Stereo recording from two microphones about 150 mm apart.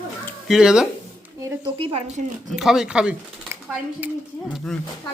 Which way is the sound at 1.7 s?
40° right (ahead or behind).